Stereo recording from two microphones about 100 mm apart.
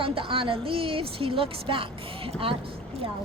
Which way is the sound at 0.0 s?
65° right (ahead or behind).